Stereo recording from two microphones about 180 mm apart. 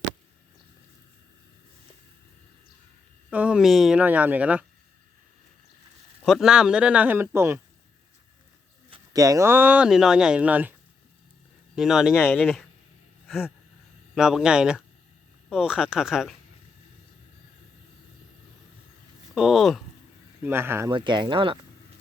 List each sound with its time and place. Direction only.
3.2 s speech: 5° right (ahead or behind)
6.2 s speech: centre (ahead or behind)
8.9 s speech: 20° right (ahead or behind); by 12.1 s centre (ahead or behind)
12.1 s speech: 10° left (ahead or behind)
13.2 s a sound: 5° right (ahead or behind)
14.2 s speech: 5° right (ahead or behind)
19.3 s speech: centre (ahead or behind)
20.4 s speech: 15° right (ahead or behind)
20.9 s speech: 25° right (ahead or behind)